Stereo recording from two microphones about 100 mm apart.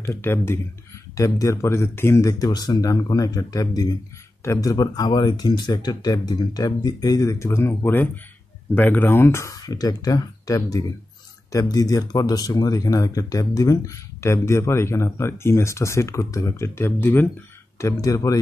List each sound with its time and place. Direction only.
0.0 s speech: 25° left (ahead or behind)
9.6 s speech: 40° left (ahead or behind); by 17.3 s 20° left (ahead or behind)
18.0 s speech: 35° left (ahead or behind)